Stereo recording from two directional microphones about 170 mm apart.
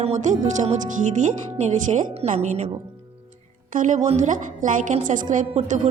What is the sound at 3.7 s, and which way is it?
Speech, 45° right (ahead or behind).